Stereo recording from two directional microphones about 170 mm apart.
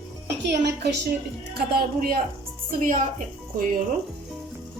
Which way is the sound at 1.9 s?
60° right (ahead or behind).